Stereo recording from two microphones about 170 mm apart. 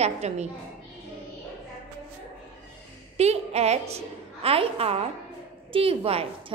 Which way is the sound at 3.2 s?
40° right (ahead or behind).